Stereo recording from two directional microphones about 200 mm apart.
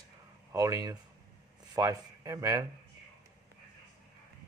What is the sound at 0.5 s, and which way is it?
Speech, 15° right (ahead or behind).